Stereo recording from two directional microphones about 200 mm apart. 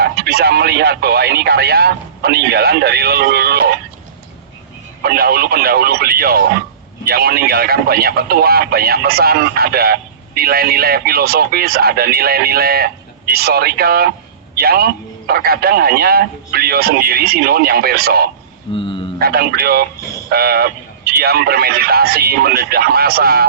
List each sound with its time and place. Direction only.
0.0 s speech: 50° right (ahead or behind)
5.0 s speech: 50° right (ahead or behind)
18.7 s speech: 25° left (ahead or behind)
19.2 s speech: 50° right (ahead or behind)